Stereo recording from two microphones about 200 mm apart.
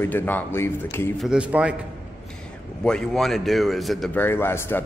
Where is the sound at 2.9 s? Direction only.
Centre (ahead or behind).